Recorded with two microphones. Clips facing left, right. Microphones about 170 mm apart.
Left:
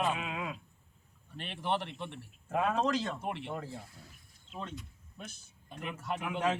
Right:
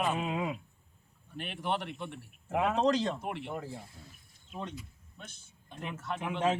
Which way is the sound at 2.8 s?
30° right (ahead or behind).